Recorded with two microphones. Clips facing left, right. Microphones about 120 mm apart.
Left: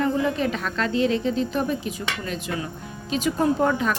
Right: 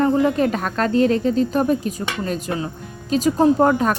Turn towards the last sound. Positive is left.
turn(degrees=-45)  # may be behind; listen again after turning